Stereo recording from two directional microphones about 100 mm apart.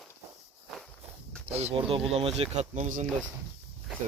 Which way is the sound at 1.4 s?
90° right.